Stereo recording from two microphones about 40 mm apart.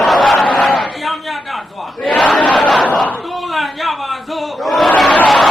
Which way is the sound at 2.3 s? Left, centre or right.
Left.